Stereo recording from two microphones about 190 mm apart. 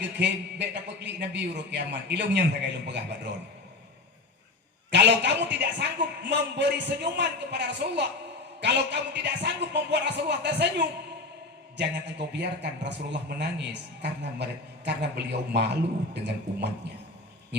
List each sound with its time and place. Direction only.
0.0 s a man's voice: 65° right (ahead or behind)
4.9 s a man's voice: 65° right (ahead or behind)